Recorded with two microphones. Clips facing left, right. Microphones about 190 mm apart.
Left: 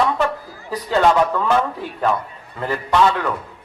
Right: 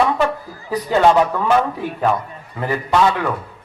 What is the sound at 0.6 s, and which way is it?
Speech, 10° right (ahead or behind).